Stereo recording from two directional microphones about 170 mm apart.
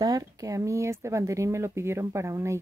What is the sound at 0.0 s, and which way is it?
Speech, 20° right (ahead or behind).